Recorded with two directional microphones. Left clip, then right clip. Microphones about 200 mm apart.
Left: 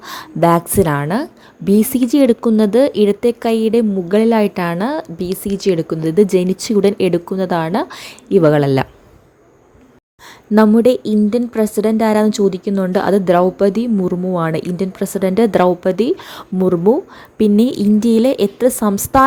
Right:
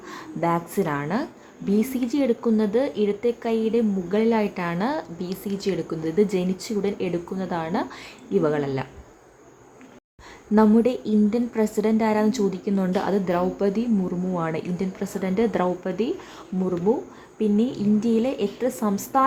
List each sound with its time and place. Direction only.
0.0 s a woman's voice: 40° left (ahead or behind)
10.5 s a woman's voice: 35° left (ahead or behind)